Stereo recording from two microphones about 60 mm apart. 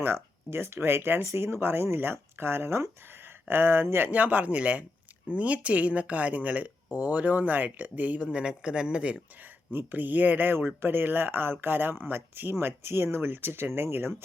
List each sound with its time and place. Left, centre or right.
0.0 s speech: right
4.1 s speech: right
9.7 s speech: right